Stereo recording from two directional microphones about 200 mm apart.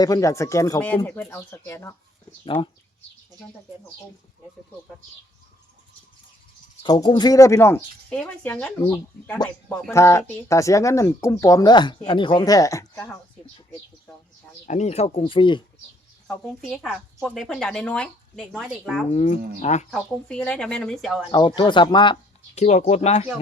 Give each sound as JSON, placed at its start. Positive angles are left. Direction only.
{"t": 0.0, "sound": "speech", "side_deg": 15}
{"t": 2.4, "sound": "speech", "side_deg": 25}
{"t": 6.8, "sound": "speech", "side_deg": 20}
{"t": 14.7, "sound": "speech", "side_deg": 35}
{"t": 16.2, "sound": "speech", "side_deg": 5}
{"t": 19.1, "sound": "speech", "side_deg": 35}
{"t": 19.9, "sound": "speech", "side_deg": 5}
{"t": 21.3, "sound": "speech", "side_deg": 20}